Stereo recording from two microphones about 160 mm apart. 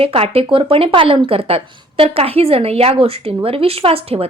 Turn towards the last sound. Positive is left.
turn(degrees=-35)  # may be behind; listen again after turning